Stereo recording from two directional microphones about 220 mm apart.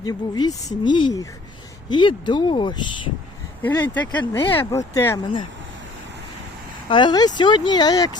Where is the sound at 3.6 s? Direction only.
10° left (ahead or behind).